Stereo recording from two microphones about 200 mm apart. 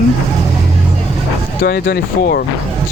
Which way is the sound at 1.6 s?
50° left (ahead or behind).